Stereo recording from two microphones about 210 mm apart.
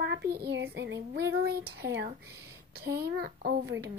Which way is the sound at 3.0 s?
50° right (ahead or behind).